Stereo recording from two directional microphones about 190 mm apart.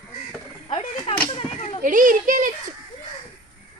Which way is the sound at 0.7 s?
25° left (ahead or behind).